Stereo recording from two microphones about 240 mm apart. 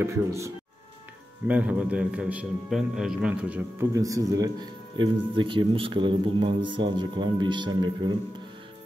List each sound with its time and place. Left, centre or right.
0.0 s speech: centre
1.5 s a man's voice: centre